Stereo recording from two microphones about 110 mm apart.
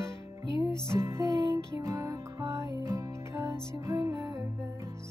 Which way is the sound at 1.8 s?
30° right (ahead or behind).